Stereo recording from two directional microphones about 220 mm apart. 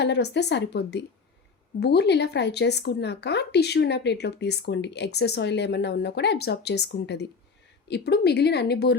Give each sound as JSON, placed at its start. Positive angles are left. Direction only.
{"t": 0.0, "sound": "speech", "side_deg": 50}